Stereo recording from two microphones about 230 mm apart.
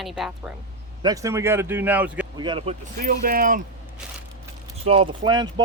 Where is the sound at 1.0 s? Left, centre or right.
Centre.